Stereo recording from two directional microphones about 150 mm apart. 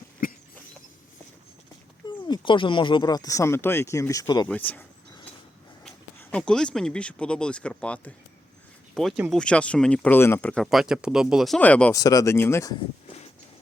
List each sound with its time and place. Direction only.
0.2 s a sound: 70° left (ahead or behind)
2.0 s speech: 30° left (ahead or behind)
4.4 s speech: 10° left (ahead or behind)
6.3 s speech: 5° left (ahead or behind)
11.6 s speech: 10° left (ahead or behind)
11.9 s speech: 25° left (ahead or behind)